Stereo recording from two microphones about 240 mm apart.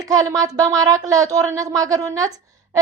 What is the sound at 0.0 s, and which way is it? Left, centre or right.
A woman's voice, centre.